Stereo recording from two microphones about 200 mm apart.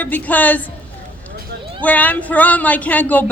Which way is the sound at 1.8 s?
10° left (ahead or behind).